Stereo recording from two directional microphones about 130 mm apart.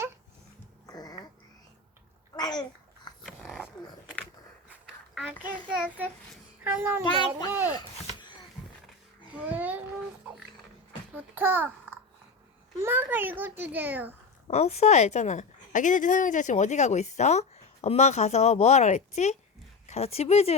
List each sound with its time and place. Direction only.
0.9 s a sound: 30° left (ahead or behind)
2.3 s babbling: 30° left (ahead or behind)
3.2 s dog: centre (ahead or behind)
5.1 s a child's voice: 10° right (ahead or behind)
6.7 s child singing: 20° right (ahead or behind)
7.0 s speech: 35° left (ahead or behind)
9.5 s a sound: 10° right (ahead or behind)
11.1 s a child's voice: 15° right (ahead or behind)
14.4 s a woman's voice: 55° left (ahead or behind)